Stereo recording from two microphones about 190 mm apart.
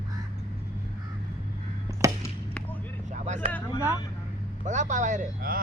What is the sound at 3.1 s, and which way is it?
Vehicle, 40° right (ahead or behind).